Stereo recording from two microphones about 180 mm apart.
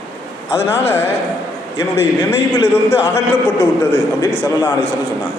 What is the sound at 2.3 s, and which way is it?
Speech, 10° right (ahead or behind).